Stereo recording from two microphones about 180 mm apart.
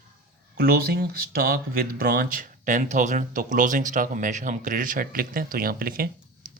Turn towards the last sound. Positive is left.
turn(degrees=-55)  # may be behind; listen again after turning